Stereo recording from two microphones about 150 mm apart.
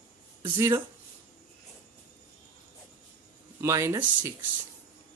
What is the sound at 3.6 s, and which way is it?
Speech, 20° right (ahead or behind).